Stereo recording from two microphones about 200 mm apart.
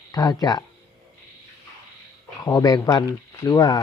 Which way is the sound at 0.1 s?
20° left (ahead or behind).